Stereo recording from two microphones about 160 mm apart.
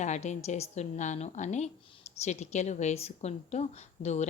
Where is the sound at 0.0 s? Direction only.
45° left (ahead or behind).